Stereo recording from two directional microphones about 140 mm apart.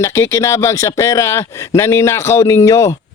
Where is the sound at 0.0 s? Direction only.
20° left (ahead or behind).